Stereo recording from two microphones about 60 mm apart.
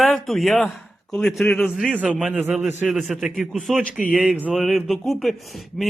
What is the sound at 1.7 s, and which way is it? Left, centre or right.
Speech, centre.